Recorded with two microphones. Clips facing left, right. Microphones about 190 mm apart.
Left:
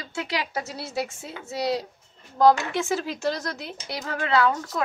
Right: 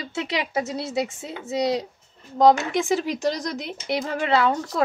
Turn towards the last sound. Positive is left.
turn(degrees=-25)  # may be behind; listen again after turning